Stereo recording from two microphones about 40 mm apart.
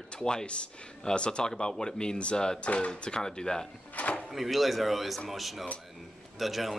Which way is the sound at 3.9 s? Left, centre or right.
Left.